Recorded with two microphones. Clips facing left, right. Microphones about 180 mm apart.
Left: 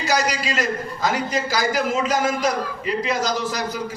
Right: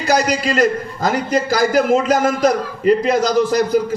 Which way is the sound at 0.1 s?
50° right (ahead or behind).